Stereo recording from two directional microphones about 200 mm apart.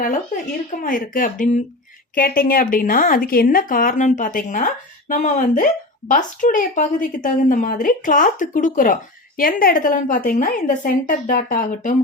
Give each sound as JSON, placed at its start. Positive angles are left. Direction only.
{"t": 0.7, "sound": "a woman's voice", "side_deg": 45}